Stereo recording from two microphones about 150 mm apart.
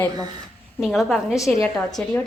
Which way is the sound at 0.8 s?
Centre (ahead or behind).